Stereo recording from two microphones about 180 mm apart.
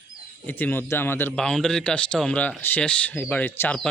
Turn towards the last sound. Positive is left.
turn(degrees=10)  # may be behind; listen again after turning